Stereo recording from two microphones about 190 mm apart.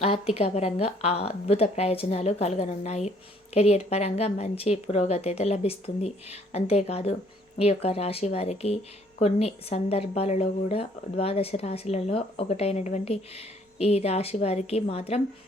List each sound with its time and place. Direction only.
0.0 s speech: 30° left (ahead or behind)